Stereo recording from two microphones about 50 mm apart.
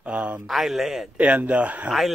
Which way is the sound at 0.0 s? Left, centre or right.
Right.